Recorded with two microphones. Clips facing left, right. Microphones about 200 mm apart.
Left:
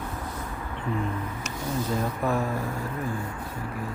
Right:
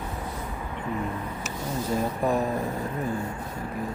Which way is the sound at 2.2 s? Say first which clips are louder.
Right 2 dB; 15° right (ahead or behind).